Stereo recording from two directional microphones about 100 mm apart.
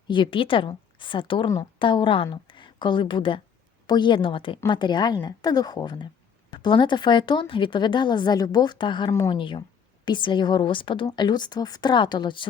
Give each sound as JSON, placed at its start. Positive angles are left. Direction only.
{"t": 0.1, "sound": "a woman's voice", "side_deg": 55}
{"t": 4.6, "sound": "a woman's voice", "side_deg": 50}
{"t": 9.0, "sound": "speech", "side_deg": 30}
{"t": 9.3, "sound": "a woman's voice", "side_deg": 55}